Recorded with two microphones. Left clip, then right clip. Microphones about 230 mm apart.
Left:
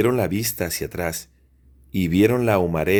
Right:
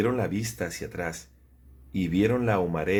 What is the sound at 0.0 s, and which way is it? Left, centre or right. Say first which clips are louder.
Speech: left 6 dB; left.